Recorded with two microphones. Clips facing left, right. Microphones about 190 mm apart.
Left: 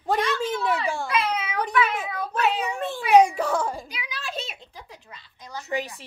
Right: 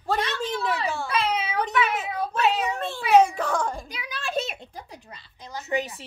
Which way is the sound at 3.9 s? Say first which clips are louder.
Right 5 dB; 50° right (ahead or behind).